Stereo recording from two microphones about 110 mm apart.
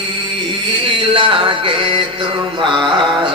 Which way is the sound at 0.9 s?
50° right (ahead or behind).